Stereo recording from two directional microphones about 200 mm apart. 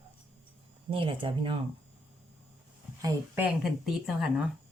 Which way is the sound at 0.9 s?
25° right (ahead or behind).